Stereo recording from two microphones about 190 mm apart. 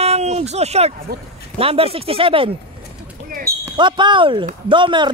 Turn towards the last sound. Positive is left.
turn(degrees=-25)  # may be behind; listen again after turning